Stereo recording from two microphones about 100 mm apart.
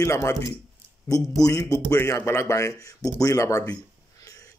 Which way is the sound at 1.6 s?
25° left (ahead or behind).